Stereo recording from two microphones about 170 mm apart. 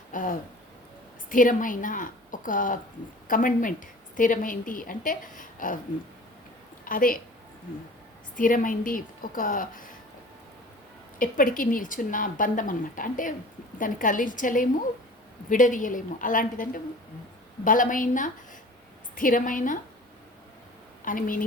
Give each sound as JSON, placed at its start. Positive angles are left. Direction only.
{"t": 0.1, "sound": "a woman's voice", "side_deg": 55}
{"t": 6.8, "sound": "a woman's voice", "side_deg": 55}
{"t": 8.4, "sound": "a woman's voice", "side_deg": 50}
{"t": 11.2, "sound": "a woman's voice", "side_deg": 55}
{"t": 21.0, "sound": "a woman's voice", "side_deg": 55}